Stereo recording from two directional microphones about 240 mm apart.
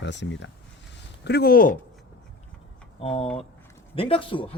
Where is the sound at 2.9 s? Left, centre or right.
Left.